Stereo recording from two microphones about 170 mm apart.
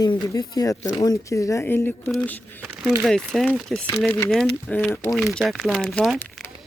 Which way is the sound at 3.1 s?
Centre (ahead or behind).